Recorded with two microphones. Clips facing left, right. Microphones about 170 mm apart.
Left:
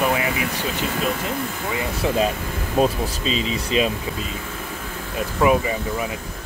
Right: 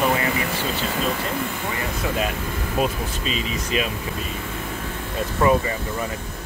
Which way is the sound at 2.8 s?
30° left (ahead or behind).